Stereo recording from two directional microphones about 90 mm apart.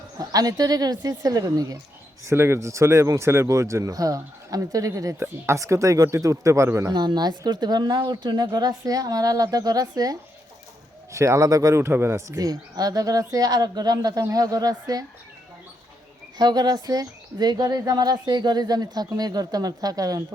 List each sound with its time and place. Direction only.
0.2 s speech: 45° right (ahead or behind)
2.2 s speech: 30° right (ahead or behind)
6.9 s speech: 50° right (ahead or behind); by 12.4 s 30° right (ahead or behind)
12.4 s speech: 45° right (ahead or behind)
16.4 s speech: 50° right (ahead or behind)